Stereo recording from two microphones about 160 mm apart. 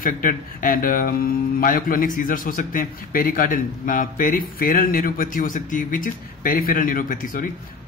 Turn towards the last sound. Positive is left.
turn(degrees=60)  # may be behind; listen again after turning